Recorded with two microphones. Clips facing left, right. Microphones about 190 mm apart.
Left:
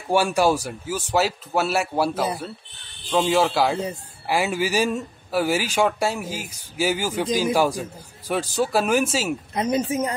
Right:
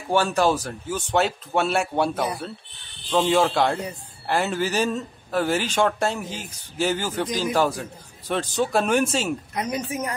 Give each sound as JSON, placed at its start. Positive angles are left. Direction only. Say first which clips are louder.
{"t": 0.1, "sound": "speech", "louder": "left 1 dB", "side_deg": 10}
{"t": 9.5, "sound": "speech", "louder": "left 5 dB", "side_deg": 25}